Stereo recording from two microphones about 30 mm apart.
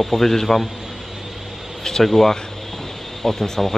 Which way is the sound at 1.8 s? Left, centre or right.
Centre.